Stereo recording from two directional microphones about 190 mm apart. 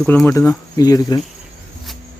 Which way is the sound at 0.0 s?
Centre (ahead or behind).